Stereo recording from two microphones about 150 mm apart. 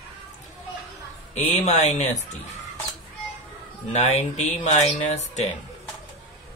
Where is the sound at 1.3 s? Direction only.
50° left (ahead or behind).